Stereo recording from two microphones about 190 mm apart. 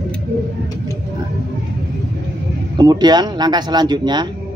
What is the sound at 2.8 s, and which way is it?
Speech, 20° right (ahead or behind).